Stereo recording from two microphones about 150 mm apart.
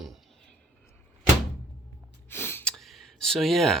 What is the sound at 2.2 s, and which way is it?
Gasp, 15° left (ahead or behind).